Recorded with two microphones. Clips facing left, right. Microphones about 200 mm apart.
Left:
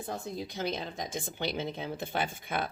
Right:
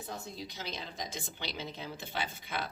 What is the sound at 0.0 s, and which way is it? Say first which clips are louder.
Speech: left 5 dB; 50° left (ahead or behind).